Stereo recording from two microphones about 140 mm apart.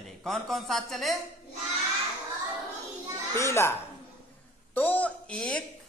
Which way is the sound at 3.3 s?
20° left (ahead or behind).